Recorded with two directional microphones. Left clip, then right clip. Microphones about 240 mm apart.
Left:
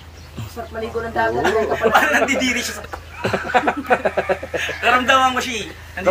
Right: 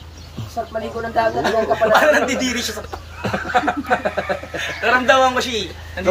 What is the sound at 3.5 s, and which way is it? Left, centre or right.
Speech, left.